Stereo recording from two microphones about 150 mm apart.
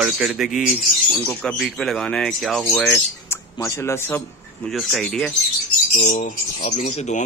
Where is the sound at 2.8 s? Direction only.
15° left (ahead or behind).